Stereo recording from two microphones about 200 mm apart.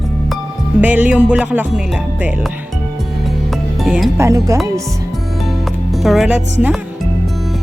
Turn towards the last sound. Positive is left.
turn(degrees=-5)  # may be behind; listen again after turning